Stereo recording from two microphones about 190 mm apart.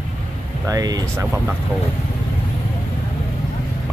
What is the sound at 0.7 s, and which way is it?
Speech, 20° right (ahead or behind).